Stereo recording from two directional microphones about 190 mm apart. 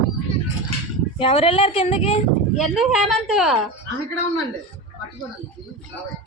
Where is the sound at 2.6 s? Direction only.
Centre (ahead or behind).